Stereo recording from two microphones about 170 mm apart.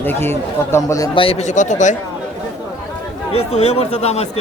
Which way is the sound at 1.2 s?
40° left (ahead or behind).